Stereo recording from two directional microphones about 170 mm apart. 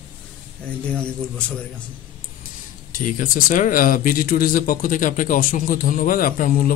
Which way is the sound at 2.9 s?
55° left (ahead or behind).